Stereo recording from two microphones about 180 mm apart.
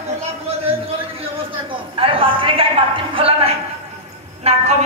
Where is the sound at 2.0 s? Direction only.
30° right (ahead or behind).